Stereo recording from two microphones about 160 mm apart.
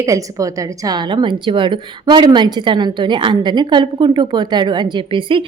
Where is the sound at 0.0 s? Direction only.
20° right (ahead or behind).